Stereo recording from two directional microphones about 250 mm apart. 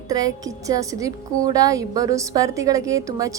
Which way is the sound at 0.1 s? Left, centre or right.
Centre.